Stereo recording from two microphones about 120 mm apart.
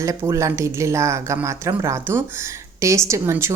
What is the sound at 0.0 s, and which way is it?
A woman's voice, 25° right (ahead or behind).